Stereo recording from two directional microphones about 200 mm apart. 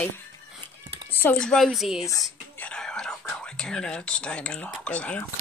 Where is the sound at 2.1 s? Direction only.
10° left (ahead or behind).